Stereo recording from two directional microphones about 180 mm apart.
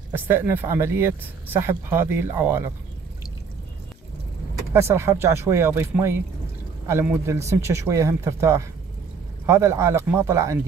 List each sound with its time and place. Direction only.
0.1 s speech: 10° right (ahead or behind)
4.7 s speech: 15° right (ahead or behind)